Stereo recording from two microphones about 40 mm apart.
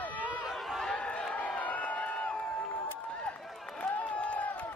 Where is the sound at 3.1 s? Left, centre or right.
Left.